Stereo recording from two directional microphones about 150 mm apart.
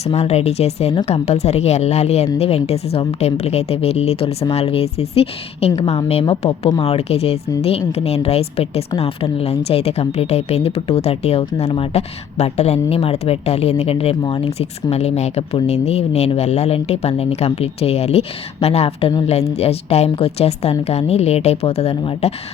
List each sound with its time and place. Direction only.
0.0 s a woman's voice: 45° left (ahead or behind)